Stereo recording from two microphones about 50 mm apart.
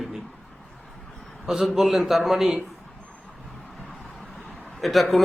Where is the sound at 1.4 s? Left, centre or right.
Centre.